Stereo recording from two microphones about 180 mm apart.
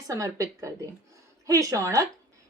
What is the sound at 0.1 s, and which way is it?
Speech, 20° right (ahead or behind).